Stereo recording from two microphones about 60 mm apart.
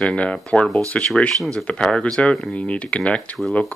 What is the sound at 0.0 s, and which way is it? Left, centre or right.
Speech, left.